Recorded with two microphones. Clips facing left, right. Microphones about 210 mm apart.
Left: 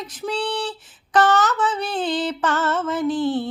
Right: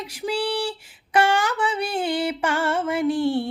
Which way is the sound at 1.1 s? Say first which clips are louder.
Left 2 dB; 10° right (ahead or behind).